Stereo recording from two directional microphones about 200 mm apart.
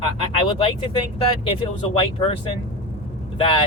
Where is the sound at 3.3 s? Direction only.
25° left (ahead or behind).